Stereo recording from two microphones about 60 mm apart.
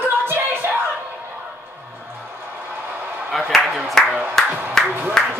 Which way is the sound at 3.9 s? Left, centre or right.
Centre.